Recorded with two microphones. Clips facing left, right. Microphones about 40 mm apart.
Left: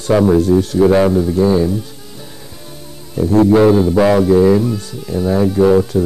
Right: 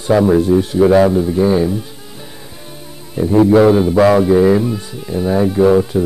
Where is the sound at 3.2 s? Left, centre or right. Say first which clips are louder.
Even; centre.